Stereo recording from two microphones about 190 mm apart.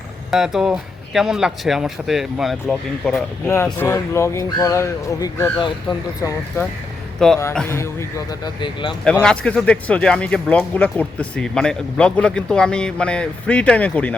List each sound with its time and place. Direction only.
0.3 s speech: centre (ahead or behind)
3.5 s speech: 15° left (ahead or behind)
5.5 s speech: 25° left (ahead or behind)
7.2 s speech: centre (ahead or behind)
7.8 s speech: 15° left (ahead or behind)
9.2 s speech: 5° left (ahead or behind)